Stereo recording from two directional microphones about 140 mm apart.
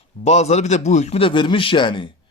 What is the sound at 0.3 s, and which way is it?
A man's voice, 50° left (ahead or behind).